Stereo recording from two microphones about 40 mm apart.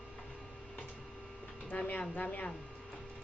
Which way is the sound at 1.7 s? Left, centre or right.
Left.